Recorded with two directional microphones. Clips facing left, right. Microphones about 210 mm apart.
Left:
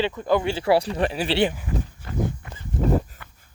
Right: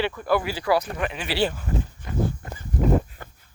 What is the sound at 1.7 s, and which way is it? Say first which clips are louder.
Speech: right 1 dB; 45° right (ahead or behind).